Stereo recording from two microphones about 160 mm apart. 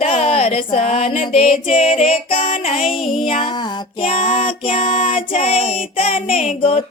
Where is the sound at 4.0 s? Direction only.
35° left (ahead or behind).